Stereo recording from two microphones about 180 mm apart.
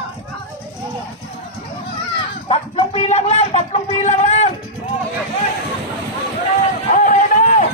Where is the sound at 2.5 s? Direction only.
30° left (ahead or behind).